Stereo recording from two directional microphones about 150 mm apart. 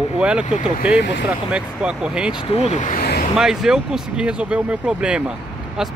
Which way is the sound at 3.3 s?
5° right (ahead or behind).